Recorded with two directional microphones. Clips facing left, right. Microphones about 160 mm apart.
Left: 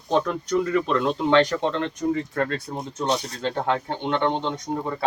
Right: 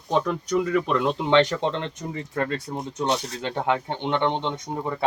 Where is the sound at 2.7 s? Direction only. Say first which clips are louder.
Even; 5° right (ahead or behind).